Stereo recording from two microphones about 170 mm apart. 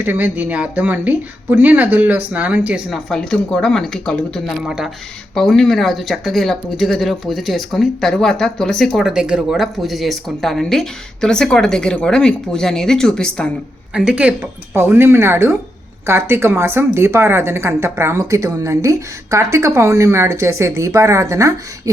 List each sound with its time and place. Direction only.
0.0 s a woman's voice: 10° right (ahead or behind); by 13.5 s 5° left (ahead or behind)
13.9 s a woman's voice: 5° right (ahead or behind)